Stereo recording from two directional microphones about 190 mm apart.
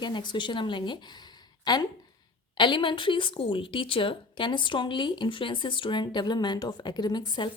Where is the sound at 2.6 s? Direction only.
25° left (ahead or behind).